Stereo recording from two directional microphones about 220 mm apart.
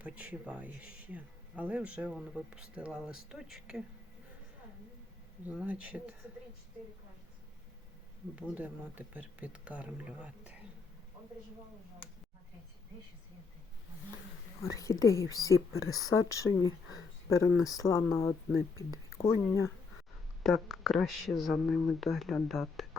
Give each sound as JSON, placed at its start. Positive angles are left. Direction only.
{"t": 0.0, "sound": "speech", "side_deg": -5}
{"t": 5.5, "sound": "speech", "side_deg": -5}
{"t": 8.4, "sound": "speech", "side_deg": -5}
{"t": 14.6, "sound": "speech", "side_deg": 15}
{"t": 15.7, "sound": "speech", "side_deg": 70}
{"t": 16.0, "sound": "speech", "side_deg": 15}
{"t": 20.4, "sound": "speech", "side_deg": 0}